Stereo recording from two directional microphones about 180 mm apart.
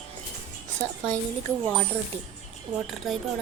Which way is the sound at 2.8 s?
Centre (ahead or behind).